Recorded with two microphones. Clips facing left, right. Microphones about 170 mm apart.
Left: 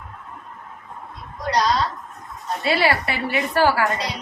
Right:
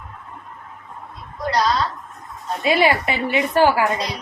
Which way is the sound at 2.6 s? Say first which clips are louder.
Right 3 dB; 15° right (ahead or behind).